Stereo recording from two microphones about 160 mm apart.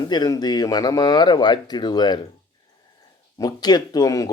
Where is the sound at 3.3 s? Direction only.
25° left (ahead or behind).